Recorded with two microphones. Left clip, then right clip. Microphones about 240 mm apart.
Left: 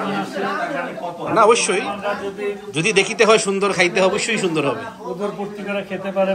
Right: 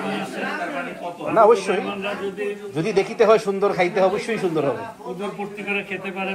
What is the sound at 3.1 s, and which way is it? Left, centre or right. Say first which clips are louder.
Speech: right 1 dB; centre.